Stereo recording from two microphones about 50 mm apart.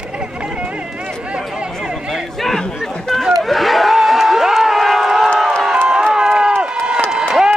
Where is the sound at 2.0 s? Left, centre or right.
Centre.